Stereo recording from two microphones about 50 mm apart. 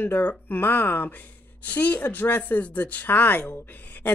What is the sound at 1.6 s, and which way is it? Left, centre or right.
Speech, left.